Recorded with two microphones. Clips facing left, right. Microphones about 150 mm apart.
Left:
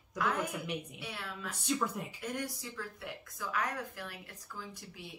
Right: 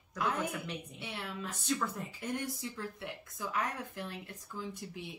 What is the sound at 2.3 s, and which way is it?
Speech, 25° right (ahead or behind).